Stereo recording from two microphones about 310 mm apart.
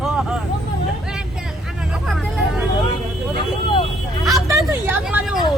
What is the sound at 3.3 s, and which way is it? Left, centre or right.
Speech, centre.